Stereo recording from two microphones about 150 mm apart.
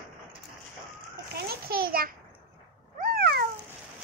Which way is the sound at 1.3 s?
90° right.